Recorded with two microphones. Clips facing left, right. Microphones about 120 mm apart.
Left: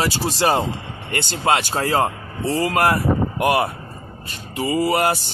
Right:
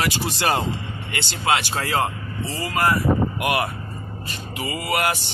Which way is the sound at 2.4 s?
60° left (ahead or behind).